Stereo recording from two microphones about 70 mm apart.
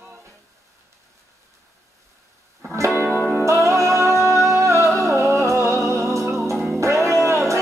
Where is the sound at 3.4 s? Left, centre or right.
Right.